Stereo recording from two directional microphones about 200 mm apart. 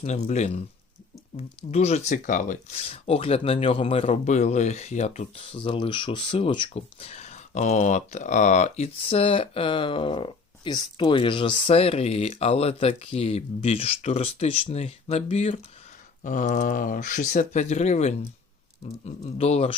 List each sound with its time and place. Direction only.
0.0 s speech: 35° left (ahead or behind)